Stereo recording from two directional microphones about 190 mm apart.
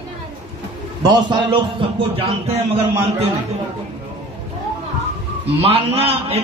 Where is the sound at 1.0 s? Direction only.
20° right (ahead or behind).